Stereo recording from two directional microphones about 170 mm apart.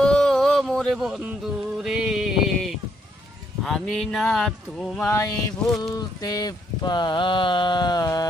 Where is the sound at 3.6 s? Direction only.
Centre (ahead or behind).